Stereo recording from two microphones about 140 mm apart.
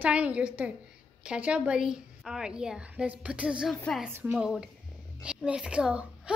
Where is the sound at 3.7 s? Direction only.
10° left (ahead or behind).